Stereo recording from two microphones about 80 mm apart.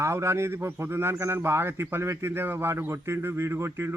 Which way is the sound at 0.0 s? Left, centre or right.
Right.